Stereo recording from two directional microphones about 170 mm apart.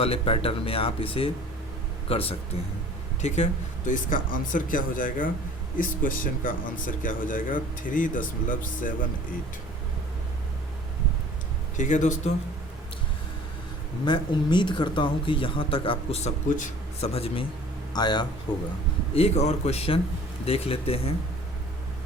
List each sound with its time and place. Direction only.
0.0 s speech: 35° left (ahead or behind); by 8.9 s 50° left (ahead or behind)
11.8 s speech: 45° left (ahead or behind)
14.0 s speech: 25° left (ahead or behind)
17.9 s speech: 25° left (ahead or behind)
19.1 s speech: 40° left (ahead or behind)